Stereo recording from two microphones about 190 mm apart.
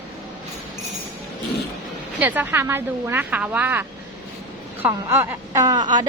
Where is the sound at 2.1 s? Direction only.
10° right (ahead or behind).